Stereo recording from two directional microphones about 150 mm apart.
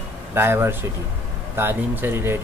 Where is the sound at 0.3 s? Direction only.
15° right (ahead or behind).